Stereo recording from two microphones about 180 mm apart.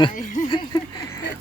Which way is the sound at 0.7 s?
20° left (ahead or behind).